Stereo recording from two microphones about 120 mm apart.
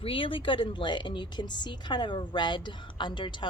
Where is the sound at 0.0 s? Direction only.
45° left (ahead or behind).